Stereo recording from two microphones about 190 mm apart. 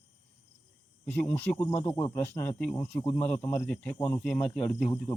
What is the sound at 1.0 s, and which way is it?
Speech, 10° left (ahead or behind).